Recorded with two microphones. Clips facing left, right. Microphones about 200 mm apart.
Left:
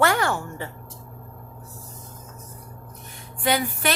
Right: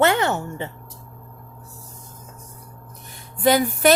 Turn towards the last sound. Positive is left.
turn(degrees=-45)  # may be behind; listen again after turning